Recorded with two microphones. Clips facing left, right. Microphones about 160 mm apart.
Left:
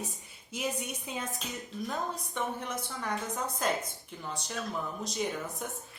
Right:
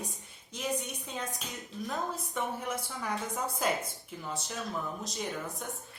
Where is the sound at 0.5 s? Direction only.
10° left (ahead or behind).